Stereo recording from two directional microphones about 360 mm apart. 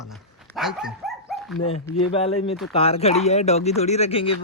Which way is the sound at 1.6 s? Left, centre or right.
Centre.